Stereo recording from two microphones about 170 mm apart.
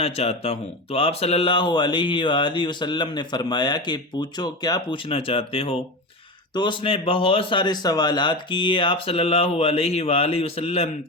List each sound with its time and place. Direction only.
0.0 s speech: 35° left (ahead or behind)